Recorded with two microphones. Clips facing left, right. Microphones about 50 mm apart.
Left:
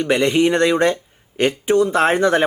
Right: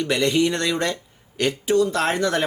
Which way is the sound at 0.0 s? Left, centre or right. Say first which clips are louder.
Left 4 dB; left.